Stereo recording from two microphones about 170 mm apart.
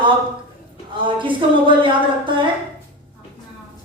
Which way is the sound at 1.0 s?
30° right (ahead or behind).